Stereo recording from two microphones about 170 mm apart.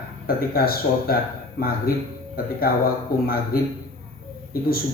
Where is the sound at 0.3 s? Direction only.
60° left (ahead or behind).